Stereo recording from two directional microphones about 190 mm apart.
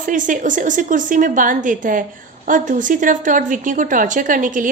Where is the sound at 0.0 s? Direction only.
45° right (ahead or behind).